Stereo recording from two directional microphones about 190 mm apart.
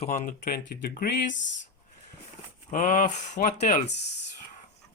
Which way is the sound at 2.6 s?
45° left (ahead or behind).